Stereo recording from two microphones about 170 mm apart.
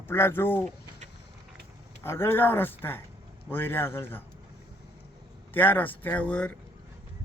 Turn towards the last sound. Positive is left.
turn(degrees=10)  # may be behind; listen again after turning